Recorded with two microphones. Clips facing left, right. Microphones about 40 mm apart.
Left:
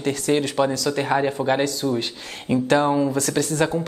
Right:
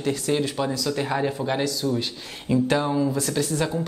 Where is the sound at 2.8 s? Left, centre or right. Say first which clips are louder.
Left 4 dB; left.